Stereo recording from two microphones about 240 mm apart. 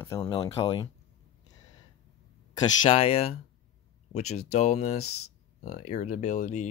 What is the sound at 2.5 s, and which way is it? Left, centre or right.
Speech, left.